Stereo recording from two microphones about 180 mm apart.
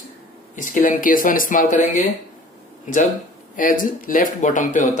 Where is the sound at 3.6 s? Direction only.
50° left (ahead or behind).